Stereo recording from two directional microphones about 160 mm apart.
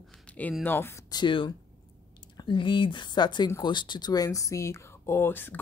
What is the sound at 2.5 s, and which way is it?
Speech, 30° left (ahead or behind).